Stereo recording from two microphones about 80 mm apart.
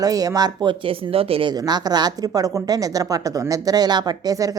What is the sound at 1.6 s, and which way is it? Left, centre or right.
A woman's voice, right.